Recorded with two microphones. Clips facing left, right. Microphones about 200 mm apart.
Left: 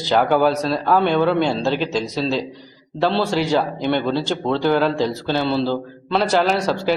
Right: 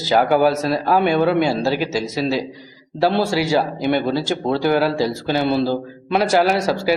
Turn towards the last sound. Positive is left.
turn(degrees=-10)  # may be behind; listen again after turning